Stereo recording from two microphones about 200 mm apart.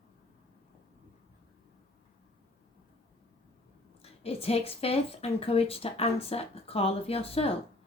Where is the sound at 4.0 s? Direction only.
30° left (ahead or behind).